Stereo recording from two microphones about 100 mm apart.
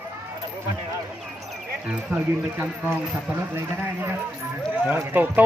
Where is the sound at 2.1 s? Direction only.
20° right (ahead or behind).